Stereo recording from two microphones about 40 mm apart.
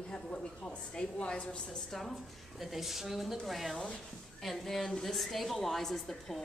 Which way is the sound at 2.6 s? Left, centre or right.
Centre.